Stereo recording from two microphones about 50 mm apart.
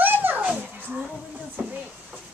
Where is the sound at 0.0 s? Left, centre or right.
Right.